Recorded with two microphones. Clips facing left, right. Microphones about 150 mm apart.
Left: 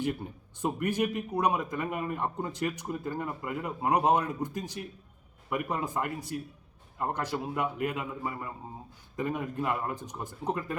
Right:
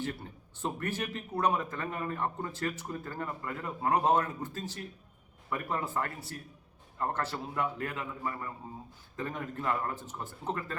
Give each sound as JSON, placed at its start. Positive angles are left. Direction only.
{"t": 0.0, "sound": "speech", "side_deg": 15}